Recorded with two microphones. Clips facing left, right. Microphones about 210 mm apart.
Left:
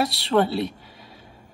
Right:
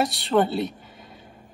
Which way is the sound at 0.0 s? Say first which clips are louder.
Even; 50° right (ahead or behind).